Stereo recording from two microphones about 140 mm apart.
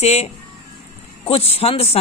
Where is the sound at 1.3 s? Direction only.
45° left (ahead or behind).